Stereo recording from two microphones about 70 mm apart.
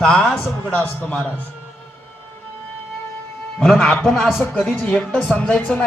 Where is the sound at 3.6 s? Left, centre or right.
Centre.